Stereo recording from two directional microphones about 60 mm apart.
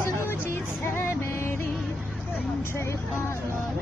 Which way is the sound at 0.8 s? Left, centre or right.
Left.